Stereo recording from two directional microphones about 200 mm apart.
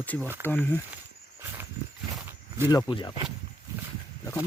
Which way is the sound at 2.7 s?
20° left (ahead or behind).